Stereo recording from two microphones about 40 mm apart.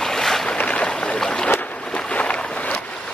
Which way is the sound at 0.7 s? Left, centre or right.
Left.